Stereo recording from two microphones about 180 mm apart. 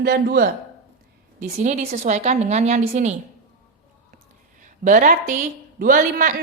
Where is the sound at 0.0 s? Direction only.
60° right (ahead or behind).